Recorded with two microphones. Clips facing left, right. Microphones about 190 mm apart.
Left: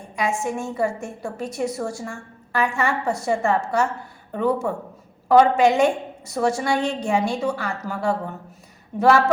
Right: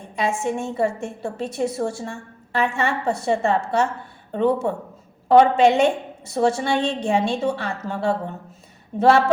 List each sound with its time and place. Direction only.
0.2 s a woman's voice: 25° right (ahead or behind)